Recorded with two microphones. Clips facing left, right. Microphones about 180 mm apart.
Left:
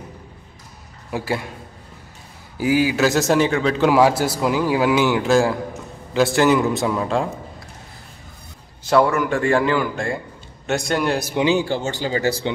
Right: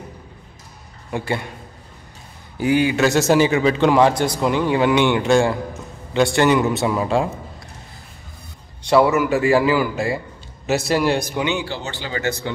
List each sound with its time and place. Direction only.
1.1 s a man's voice: 5° left (ahead or behind)
2.5 s a man's voice: 5° left (ahead or behind)
8.8 s a man's voice: 5° right (ahead or behind)
11.3 s speech: 30° left (ahead or behind)
11.6 s speech: 45° left (ahead or behind)